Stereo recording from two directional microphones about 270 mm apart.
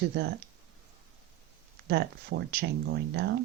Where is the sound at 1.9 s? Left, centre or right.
Right.